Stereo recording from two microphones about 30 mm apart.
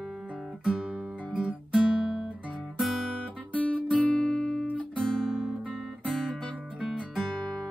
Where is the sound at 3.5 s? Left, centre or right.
Left.